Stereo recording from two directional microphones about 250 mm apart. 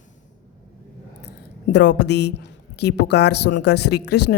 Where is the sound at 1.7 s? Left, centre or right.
Left.